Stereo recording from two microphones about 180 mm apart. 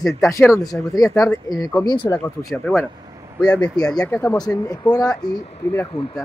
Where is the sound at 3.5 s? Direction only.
5° left (ahead or behind); by 6.1 s 25° left (ahead or behind).